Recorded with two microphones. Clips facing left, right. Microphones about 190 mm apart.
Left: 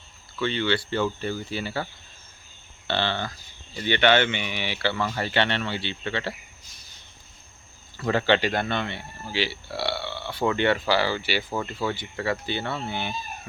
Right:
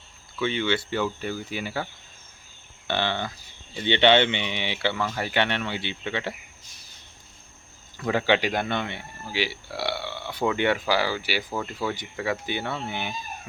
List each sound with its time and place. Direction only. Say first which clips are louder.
0.3 s speech: even; 10° right (ahead or behind)
4.9 s speech: left 2 dB; 5° right (ahead or behind)
7.9 s speech: left 1 dB; 10° right (ahead or behind)